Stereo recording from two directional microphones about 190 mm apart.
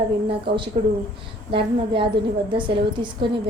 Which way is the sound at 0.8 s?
35° right (ahead or behind).